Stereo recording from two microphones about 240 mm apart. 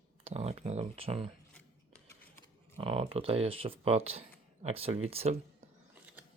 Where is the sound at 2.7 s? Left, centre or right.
Right.